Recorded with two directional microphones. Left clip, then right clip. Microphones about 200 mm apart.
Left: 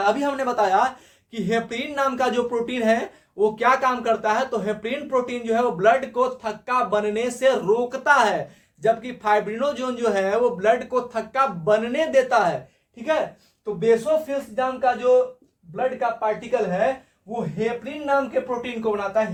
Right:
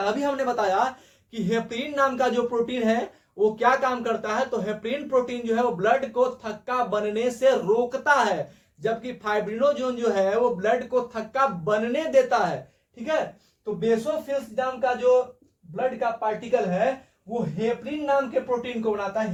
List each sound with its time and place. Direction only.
0.0 s speech: 15° left (ahead or behind)
13.7 s a man's voice: 15° left (ahead or behind)